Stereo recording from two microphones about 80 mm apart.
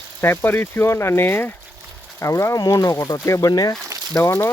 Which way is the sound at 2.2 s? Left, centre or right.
Left.